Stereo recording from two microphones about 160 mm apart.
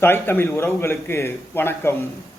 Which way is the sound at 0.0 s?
15° left (ahead or behind).